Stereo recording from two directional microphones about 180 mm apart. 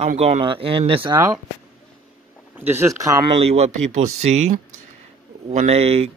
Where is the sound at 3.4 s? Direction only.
35° right (ahead or behind).